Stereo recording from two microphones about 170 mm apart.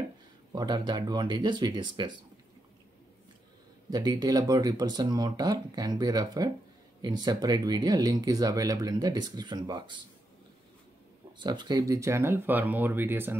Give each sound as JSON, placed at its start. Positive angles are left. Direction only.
{"t": 0.5, "sound": "speech", "side_deg": -25}
{"t": 3.9, "sound": "speech", "side_deg": -20}
{"t": 11.3, "sound": "speech", "side_deg": -25}